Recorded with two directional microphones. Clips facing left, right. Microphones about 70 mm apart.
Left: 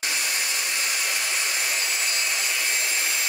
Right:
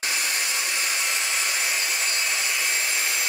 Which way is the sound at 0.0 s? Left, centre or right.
Centre.